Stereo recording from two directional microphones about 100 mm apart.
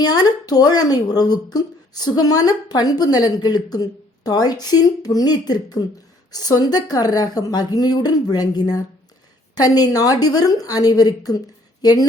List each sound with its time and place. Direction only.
0.0 s a woman's voice: 40° left (ahead or behind)